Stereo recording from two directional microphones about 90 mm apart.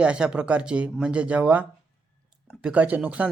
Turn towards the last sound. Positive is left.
turn(degrees=-15)  # may be behind; listen again after turning